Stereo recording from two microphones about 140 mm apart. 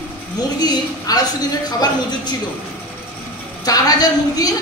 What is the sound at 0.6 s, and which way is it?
Speech, 30° left (ahead or behind).